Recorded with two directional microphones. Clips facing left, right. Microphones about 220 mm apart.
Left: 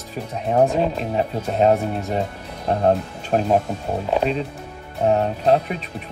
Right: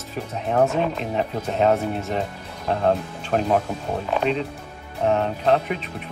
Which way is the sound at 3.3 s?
35° left (ahead or behind).